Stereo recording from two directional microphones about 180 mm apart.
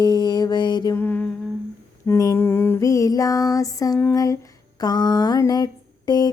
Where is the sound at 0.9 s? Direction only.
10° left (ahead or behind).